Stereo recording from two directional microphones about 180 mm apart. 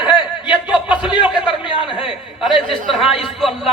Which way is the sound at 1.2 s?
5° right (ahead or behind).